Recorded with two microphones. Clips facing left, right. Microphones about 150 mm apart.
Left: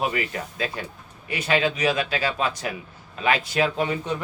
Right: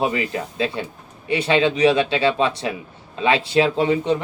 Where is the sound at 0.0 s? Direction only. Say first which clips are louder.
Right 4 dB; 25° right (ahead or behind).